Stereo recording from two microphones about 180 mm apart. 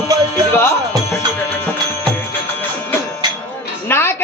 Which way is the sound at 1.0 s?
10° left (ahead or behind).